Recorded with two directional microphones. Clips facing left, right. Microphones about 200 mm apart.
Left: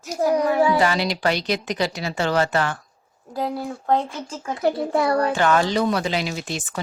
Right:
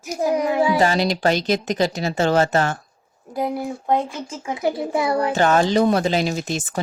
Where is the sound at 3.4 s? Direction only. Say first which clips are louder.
Right 2 dB; 15° right (ahead or behind).